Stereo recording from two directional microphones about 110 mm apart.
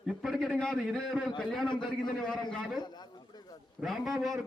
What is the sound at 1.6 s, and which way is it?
Speech, 45° left (ahead or behind).